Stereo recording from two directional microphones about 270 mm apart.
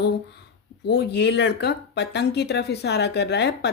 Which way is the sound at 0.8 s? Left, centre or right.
Left.